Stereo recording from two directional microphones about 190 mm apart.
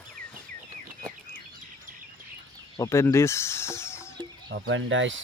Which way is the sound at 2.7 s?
15° left (ahead or behind).